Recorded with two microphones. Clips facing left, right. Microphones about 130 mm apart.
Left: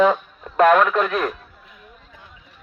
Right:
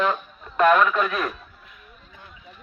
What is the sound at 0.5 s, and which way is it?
Speech, 85° left.